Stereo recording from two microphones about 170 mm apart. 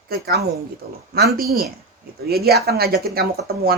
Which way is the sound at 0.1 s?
70° right (ahead or behind).